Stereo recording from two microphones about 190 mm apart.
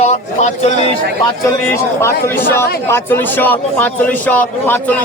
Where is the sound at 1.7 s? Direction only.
15° left (ahead or behind).